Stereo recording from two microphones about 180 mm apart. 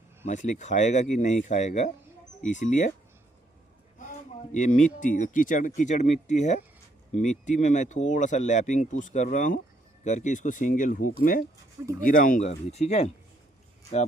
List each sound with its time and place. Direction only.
0.3 s speech: 45° left (ahead or behind)
3.9 s speech: 45° left (ahead or behind)